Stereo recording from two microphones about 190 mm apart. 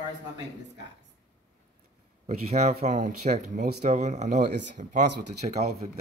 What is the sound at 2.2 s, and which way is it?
Speech, 40° right (ahead or behind).